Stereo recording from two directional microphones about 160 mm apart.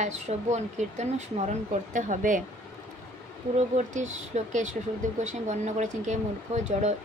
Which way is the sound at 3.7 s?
50° right (ahead or behind).